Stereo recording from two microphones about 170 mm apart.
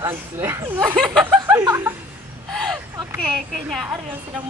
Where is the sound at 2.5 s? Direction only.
Centre (ahead or behind).